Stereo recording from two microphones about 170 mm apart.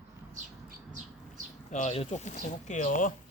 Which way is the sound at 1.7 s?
40° left (ahead or behind).